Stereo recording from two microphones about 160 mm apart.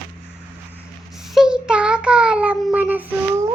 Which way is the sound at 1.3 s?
5° right (ahead or behind).